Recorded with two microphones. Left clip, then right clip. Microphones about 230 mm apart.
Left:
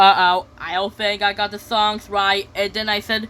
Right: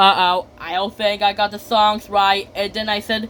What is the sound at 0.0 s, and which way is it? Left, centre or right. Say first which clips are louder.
Speech: left 1 dB; centre.